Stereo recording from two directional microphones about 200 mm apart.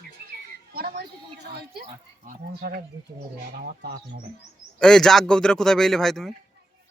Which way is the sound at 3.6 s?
50° right (ahead or behind).